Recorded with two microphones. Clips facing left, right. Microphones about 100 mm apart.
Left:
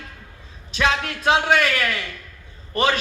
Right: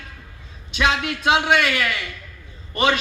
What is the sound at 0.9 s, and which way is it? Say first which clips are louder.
A man's voice: even; 40° left (ahead or behind).